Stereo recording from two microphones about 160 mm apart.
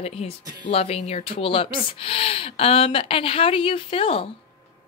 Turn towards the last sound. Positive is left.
turn(degrees=35)  # may be behind; listen again after turning